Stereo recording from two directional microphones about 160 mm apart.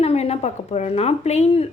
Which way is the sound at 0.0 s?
40° left (ahead or behind).